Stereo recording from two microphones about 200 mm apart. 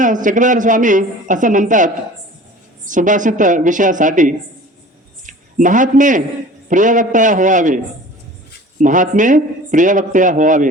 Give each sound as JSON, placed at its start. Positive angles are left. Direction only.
{"t": 0.0, "sound": "a woman's voice", "side_deg": -40}
{"t": 8.8, "sound": "a woman's voice", "side_deg": -40}